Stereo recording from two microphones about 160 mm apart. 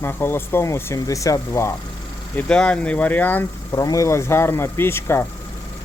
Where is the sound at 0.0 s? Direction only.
15° left (ahead or behind).